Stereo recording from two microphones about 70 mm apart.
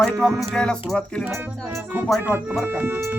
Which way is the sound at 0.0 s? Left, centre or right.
Centre.